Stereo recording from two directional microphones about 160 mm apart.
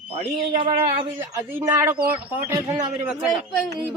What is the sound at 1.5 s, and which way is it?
A man's voice, 15° right (ahead or behind).